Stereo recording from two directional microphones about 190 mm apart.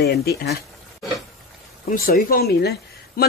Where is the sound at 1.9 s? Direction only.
50° left (ahead or behind).